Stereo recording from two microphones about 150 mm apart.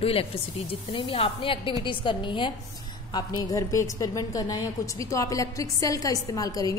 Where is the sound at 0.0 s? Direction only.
40° left (ahead or behind).